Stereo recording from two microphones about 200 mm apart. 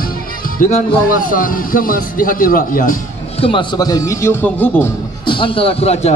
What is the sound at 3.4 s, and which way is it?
Speech, 25° left (ahead or behind).